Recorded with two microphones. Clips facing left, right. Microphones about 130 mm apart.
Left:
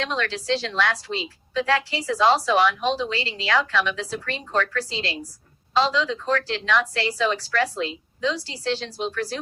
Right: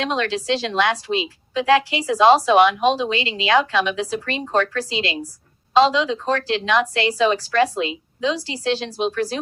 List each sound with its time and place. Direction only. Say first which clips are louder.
0.0 s speech: right 5 dB; 20° right (ahead or behind)
6.9 s speech: right 5 dB; 65° right (ahead or behind)
8.4 s speech: right 4 dB; 20° right (ahead or behind)